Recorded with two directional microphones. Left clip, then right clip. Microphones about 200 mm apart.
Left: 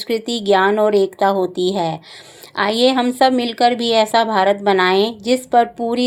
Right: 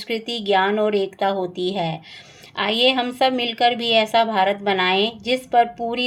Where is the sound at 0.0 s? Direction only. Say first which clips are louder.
Left 5 dB; 35° left (ahead or behind).